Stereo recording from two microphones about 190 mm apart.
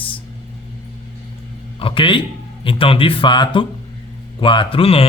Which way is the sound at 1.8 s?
30° left (ahead or behind).